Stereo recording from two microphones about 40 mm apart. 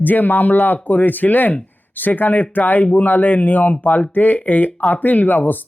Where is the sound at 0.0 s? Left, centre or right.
Left.